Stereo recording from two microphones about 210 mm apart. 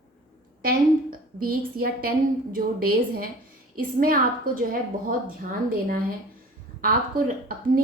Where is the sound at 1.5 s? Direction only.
45° right (ahead or behind).